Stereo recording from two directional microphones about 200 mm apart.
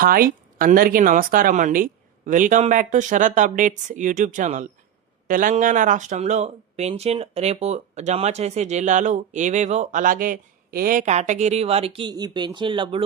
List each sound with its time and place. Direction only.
0.0 s speech: 45° right (ahead or behind); by 13.0 s 25° right (ahead or behind)